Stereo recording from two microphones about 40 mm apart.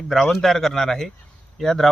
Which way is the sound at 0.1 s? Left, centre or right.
Centre.